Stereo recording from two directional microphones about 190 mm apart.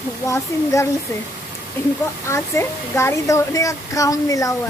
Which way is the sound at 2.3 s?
15° left (ahead or behind).